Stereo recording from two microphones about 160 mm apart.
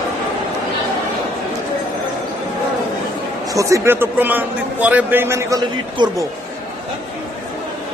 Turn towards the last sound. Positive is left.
turn(degrees=-25)  # may be behind; listen again after turning